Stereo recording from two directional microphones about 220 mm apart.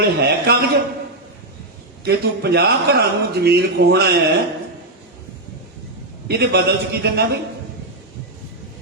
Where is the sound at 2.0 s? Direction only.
45° right (ahead or behind).